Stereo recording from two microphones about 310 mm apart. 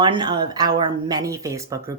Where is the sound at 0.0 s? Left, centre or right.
Centre.